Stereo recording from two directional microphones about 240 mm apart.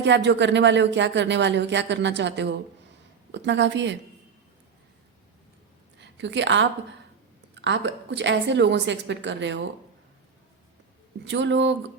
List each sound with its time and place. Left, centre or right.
0.0 s speech: right
6.0 s a woman's voice: right
11.3 s speech: right